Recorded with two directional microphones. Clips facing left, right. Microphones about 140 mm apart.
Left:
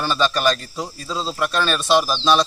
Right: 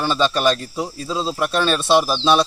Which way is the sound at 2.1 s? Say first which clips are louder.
Right 1 dB; 10° right (ahead or behind).